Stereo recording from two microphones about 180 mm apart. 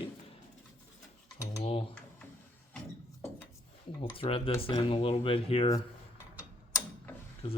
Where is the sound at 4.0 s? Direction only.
30° left (ahead or behind).